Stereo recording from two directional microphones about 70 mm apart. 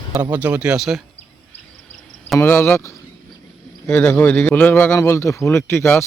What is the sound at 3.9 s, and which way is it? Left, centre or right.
A man's voice, centre.